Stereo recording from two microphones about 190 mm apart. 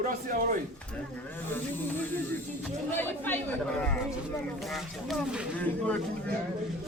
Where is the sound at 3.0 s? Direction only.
10° left (ahead or behind).